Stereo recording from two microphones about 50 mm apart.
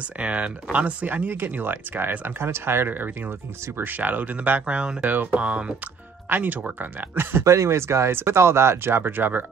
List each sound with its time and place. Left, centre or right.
0.2 s speech: right
2.9 s speech: right
4.6 s speech: right
6.2 s speech: right
7.4 s speech: right